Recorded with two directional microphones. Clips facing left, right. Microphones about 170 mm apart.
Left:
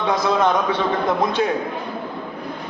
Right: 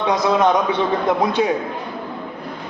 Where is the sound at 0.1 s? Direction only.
20° right (ahead or behind).